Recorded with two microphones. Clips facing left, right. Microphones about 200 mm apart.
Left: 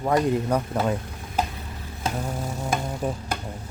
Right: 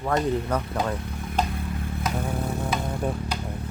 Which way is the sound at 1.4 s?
10° left (ahead or behind).